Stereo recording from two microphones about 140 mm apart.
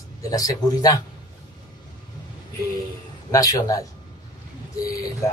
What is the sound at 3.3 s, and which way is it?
Speech, 25° left (ahead or behind).